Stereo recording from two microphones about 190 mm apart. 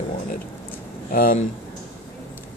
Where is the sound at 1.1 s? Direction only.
45° left (ahead or behind).